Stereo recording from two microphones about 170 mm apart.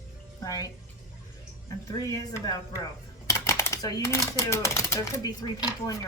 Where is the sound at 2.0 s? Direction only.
20° left (ahead or behind).